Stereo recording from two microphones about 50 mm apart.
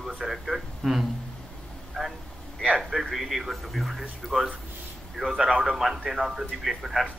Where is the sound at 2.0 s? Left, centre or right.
Centre.